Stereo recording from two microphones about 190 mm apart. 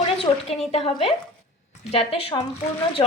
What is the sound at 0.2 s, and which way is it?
A woman's voice, 30° left (ahead or behind).